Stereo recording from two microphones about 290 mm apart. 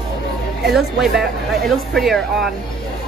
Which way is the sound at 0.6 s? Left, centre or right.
Centre.